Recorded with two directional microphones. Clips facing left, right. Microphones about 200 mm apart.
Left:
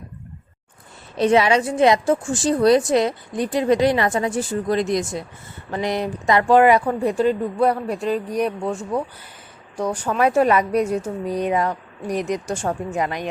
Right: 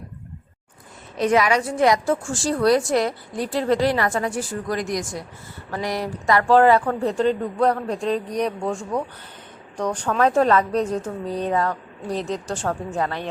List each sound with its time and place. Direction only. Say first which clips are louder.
1.1 s a woman's voice: left 3 dB; 30° left (ahead or behind)